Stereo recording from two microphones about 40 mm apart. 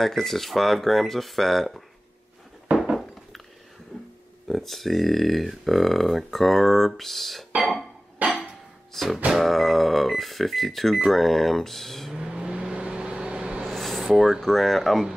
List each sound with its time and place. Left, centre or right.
0.0 s speech: centre
4.5 s speech: centre
8.2 s a sound: right
8.9 s music: centre
9.3 s speech: centre
12.2 s vehicle: centre
13.7 s a sound: centre
14.4 s speech: centre